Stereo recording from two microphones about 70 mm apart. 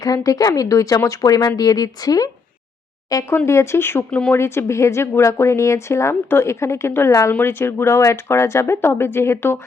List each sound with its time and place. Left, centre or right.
0.0 s speech: left
3.2 s speech: left